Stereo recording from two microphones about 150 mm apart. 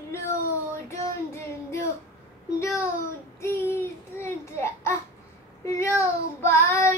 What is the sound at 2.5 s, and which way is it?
Speech, 20° left (ahead or behind).